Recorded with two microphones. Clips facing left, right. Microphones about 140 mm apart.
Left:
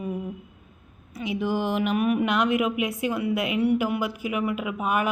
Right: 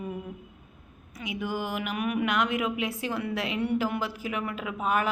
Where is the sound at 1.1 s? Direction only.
30° left (ahead or behind).